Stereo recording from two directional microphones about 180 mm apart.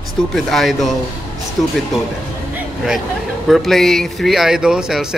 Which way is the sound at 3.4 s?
Centre (ahead or behind).